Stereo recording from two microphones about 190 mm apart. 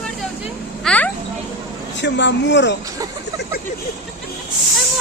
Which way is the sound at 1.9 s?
70° left (ahead or behind).